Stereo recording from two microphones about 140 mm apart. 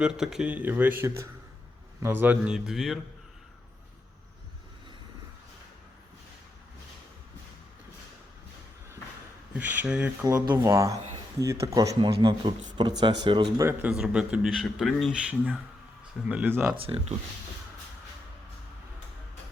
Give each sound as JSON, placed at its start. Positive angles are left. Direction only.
{"t": 0.0, "sound": "speech", "side_deg": -5}
{"t": 9.6, "sound": "speech", "side_deg": -10}
{"t": 10.2, "sound": "speech", "side_deg": -25}
{"t": 11.9, "sound": "speech", "side_deg": -35}
{"t": 13.8, "sound": "a man's voice", "side_deg": -5}
{"t": 16.7, "sound": "speech", "side_deg": -45}